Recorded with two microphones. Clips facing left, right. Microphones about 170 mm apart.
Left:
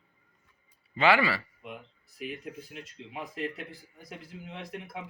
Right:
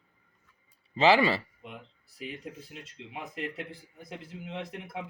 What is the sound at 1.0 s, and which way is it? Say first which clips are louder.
Speech: right 2 dB; 25° right (ahead or behind).